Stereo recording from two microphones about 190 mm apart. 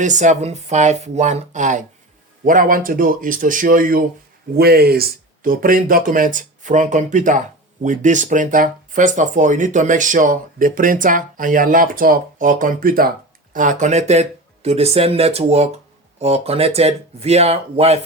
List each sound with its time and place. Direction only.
0.0 s speech: 40° right (ahead or behind)